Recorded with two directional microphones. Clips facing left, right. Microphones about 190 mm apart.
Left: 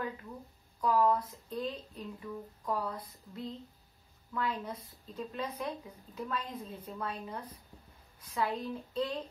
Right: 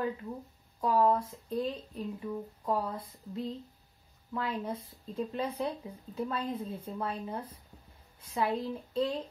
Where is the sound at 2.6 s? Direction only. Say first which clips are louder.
Right 3 dB; 25° right (ahead or behind).